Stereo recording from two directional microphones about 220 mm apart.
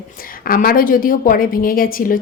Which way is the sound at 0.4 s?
40° left (ahead or behind).